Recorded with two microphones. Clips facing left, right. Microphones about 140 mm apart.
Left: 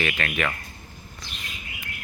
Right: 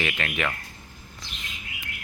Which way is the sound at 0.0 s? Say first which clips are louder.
Left 2 dB; 20° right (ahead or behind).